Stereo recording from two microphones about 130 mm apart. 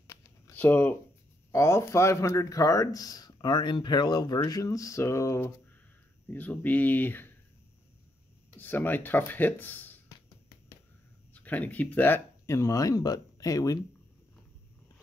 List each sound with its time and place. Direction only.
0.0 s a sound: 20° left (ahead or behind)
1.5 s speech: 20° left (ahead or behind)
6.2 s speech: 10° left (ahead or behind)
8.5 s speech: 15° left (ahead or behind)
11.3 s speech: 10° left (ahead or behind)